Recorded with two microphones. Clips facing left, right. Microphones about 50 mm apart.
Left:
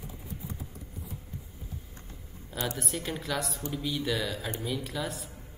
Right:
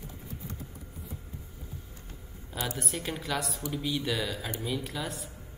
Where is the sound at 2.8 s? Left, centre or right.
Centre.